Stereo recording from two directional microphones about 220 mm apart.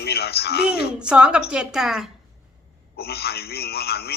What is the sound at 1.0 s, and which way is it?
A woman's voice, 5° right (ahead or behind).